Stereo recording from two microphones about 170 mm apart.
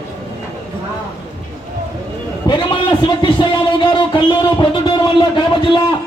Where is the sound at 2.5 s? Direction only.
25° left (ahead or behind).